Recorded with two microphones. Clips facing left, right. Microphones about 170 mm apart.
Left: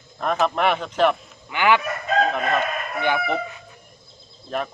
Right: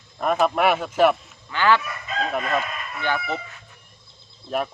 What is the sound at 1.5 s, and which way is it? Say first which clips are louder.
Fowl: left 1 dB; 15° left (ahead or behind).